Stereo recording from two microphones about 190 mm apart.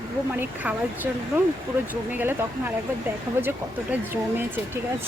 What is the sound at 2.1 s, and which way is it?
Speech, 10° right (ahead or behind).